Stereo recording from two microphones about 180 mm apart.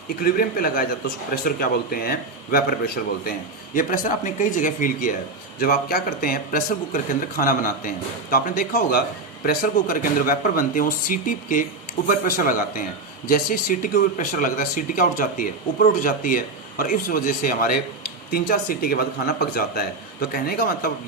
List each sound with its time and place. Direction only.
0.2 s a man's voice: 55° left (ahead or behind)